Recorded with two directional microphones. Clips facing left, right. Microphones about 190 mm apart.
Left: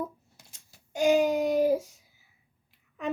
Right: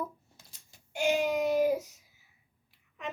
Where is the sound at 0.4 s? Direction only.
15° left (ahead or behind).